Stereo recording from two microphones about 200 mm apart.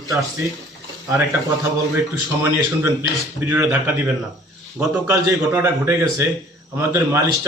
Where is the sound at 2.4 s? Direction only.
10° right (ahead or behind).